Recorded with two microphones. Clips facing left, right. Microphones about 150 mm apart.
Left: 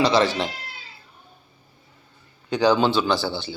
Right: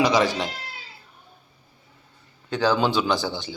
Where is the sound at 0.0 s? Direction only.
15° right (ahead or behind).